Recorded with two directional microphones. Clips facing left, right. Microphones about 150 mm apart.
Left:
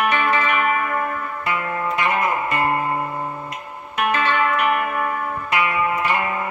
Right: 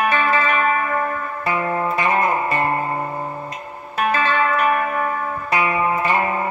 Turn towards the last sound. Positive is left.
turn(degrees=-35)  # may be behind; listen again after turning